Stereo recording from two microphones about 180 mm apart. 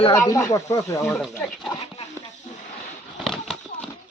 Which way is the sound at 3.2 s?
Centre (ahead or behind).